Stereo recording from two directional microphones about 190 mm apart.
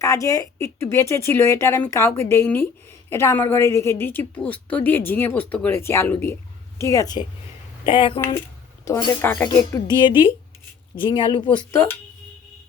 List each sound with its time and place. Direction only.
0.0 s speech: 15° left (ahead or behind)
8.8 s speech: 15° left (ahead or behind)
11.0 s speech: 25° left (ahead or behind)
11.5 s speech: 15° left (ahead or behind)